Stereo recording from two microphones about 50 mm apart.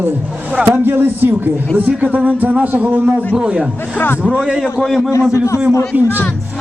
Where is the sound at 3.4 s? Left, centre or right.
Right.